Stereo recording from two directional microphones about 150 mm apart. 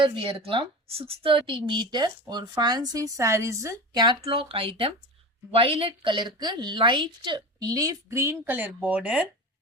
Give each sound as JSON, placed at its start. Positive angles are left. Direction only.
{"t": 0.0, "sound": "a woman's voice", "side_deg": -35}